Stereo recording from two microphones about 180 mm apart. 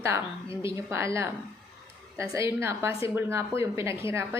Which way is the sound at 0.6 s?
15° right (ahead or behind).